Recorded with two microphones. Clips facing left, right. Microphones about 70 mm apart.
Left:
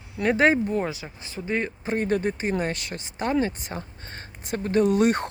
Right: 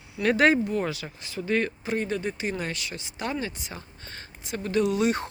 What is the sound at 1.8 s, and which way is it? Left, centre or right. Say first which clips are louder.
Speech: left 4 dB; left.